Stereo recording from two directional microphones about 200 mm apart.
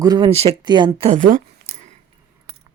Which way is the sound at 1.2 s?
40° right (ahead or behind).